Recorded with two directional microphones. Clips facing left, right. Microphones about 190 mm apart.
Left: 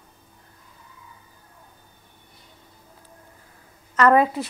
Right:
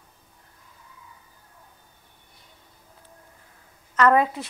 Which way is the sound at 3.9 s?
5° left (ahead or behind).